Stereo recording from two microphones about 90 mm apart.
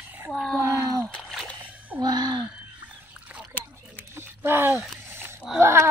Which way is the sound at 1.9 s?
50° right (ahead or behind).